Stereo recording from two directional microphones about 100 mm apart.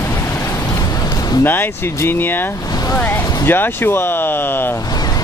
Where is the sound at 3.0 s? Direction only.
20° left (ahead or behind).